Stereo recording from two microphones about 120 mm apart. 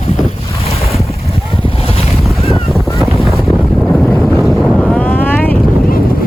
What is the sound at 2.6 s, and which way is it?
Boat, centre (ahead or behind).